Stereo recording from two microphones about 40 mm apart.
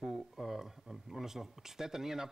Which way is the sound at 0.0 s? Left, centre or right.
Centre.